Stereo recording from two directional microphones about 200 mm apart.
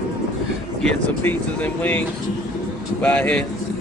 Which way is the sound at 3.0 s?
5° left (ahead or behind).